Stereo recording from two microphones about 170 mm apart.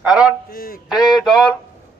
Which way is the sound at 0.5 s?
60° left (ahead or behind).